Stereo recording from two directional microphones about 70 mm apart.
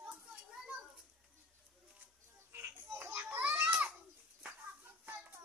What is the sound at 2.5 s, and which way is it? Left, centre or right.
Babbling, right.